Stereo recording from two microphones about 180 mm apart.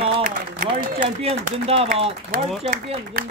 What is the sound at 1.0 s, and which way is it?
Speech, 35° right (ahead or behind).